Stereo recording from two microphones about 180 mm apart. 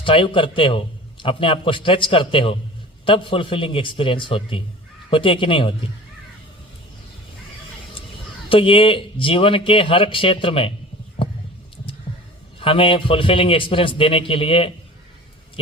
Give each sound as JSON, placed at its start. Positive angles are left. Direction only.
{"t": 0.0, "sound": "a man's voice", "side_deg": 30}
{"t": 8.4, "sound": "a man's voice", "side_deg": 30}
{"t": 12.5, "sound": "a man's voice", "side_deg": 30}